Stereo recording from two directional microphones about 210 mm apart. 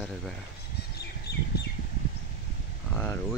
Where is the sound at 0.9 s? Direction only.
50° left (ahead or behind).